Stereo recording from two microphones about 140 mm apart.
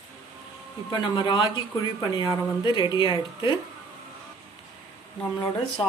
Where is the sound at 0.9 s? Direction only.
30° left (ahead or behind).